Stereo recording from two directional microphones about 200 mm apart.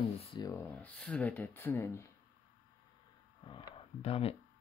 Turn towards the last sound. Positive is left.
turn(degrees=30)  # may be behind; listen again after turning